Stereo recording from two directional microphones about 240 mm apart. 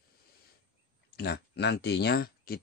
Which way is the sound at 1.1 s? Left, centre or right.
Left.